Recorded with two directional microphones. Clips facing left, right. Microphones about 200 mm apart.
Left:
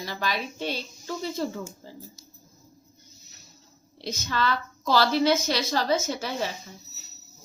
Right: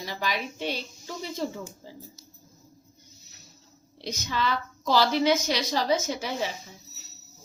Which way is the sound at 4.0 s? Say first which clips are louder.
Left 1 dB; 15° right (ahead or behind).